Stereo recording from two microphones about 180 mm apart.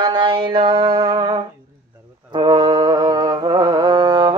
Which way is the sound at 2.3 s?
25° right (ahead or behind).